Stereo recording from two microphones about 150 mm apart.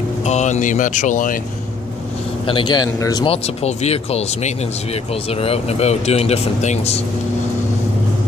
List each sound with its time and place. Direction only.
0.2 s speech: 50° left (ahead or behind)
2.4 s speech: 30° left (ahead or behind)
3.3 s speech: 45° left (ahead or behind)